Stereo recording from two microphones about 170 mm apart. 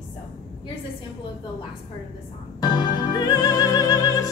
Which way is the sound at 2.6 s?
25° left (ahead or behind).